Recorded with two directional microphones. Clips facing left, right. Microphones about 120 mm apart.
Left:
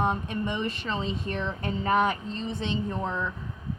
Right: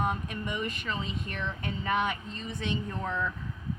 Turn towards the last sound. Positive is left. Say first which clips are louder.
# left 2 dB
turn(degrees=20)  # may be behind; listen again after turning